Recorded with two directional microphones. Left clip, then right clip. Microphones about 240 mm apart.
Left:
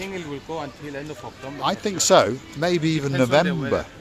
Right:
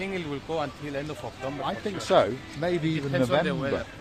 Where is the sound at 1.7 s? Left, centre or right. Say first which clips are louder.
Left 9 dB; left.